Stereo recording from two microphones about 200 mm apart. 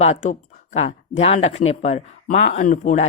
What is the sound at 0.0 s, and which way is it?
Speech, 35° left (ahead or behind).